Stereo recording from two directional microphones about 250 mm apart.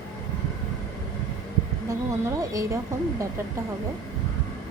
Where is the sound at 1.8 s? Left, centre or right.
Centre.